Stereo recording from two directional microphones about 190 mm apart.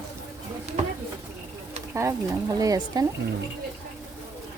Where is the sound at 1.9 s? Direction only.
15° right (ahead or behind).